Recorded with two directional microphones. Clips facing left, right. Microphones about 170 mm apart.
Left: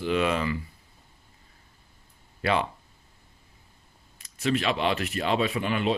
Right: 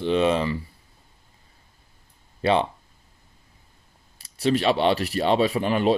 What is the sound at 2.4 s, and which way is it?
Speech, 25° right (ahead or behind).